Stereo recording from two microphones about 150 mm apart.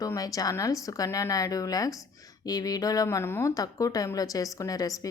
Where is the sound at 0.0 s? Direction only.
25° left (ahead or behind).